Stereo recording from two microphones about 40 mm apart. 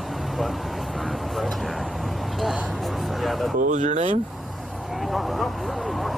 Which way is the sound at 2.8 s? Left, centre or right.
Centre.